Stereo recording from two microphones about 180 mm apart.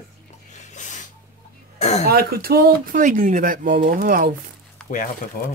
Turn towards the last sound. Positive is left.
turn(degrees=50)  # may be behind; listen again after turning